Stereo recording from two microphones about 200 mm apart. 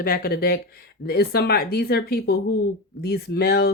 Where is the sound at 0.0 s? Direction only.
50° left (ahead or behind).